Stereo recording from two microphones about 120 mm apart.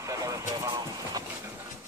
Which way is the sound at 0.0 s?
30° right (ahead or behind).